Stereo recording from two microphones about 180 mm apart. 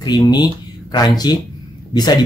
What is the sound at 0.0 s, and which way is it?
Speech, 20° left (ahead or behind).